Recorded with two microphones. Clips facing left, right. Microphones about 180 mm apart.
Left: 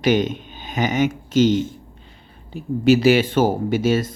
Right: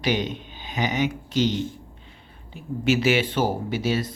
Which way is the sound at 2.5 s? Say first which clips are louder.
Left 7 dB; 35° left (ahead or behind).